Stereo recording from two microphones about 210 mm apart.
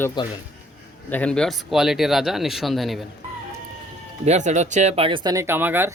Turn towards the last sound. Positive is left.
turn(degrees=-10)  # may be behind; listen again after turning